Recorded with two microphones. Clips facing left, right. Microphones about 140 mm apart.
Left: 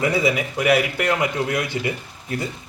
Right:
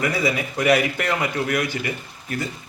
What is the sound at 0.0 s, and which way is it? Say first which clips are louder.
Speech: left 3 dB; 25° left (ahead or behind).